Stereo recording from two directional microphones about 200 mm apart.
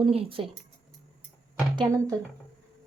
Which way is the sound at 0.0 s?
25° right (ahead or behind).